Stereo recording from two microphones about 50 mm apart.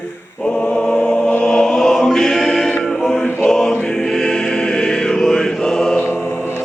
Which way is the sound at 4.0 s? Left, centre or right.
Centre.